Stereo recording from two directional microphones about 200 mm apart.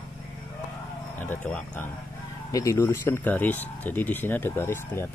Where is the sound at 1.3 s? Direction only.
10° left (ahead or behind).